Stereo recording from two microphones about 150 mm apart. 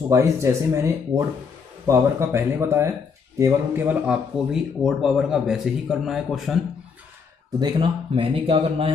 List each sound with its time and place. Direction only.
0.1 s speech: 20° right (ahead or behind); by 6.5 s centre (ahead or behind)
7.6 s speech: 30° right (ahead or behind)